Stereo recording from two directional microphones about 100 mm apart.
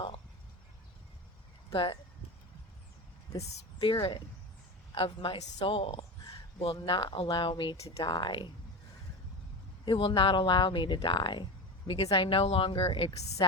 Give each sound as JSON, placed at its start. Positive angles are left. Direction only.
{"t": 1.7, "sound": "speech", "side_deg": 60}
{"t": 3.5, "sound": "speech", "side_deg": 60}
{"t": 4.9, "sound": "speech", "side_deg": 65}
{"t": 9.8, "sound": "speech", "side_deg": 60}
{"t": 11.9, "sound": "speech", "side_deg": 70}
{"t": 13.4, "sound": "speech", "side_deg": 55}